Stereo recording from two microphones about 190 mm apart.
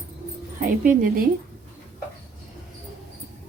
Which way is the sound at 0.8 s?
45° right (ahead or behind).